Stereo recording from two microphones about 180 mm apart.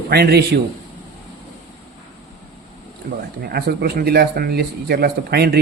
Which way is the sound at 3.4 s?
60° right (ahead or behind).